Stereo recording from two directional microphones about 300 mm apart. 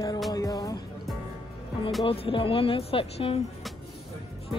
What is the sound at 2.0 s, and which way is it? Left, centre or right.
Speech, centre.